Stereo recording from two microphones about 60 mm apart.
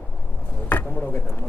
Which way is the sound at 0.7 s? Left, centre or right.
Left.